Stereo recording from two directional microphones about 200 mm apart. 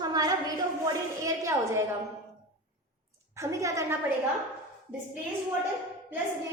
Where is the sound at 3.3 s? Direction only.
15° right (ahead or behind).